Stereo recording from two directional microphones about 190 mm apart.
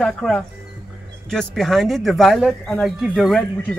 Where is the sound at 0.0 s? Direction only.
Centre (ahead or behind).